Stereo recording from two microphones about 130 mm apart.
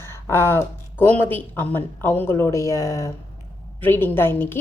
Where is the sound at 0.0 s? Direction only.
20° left (ahead or behind).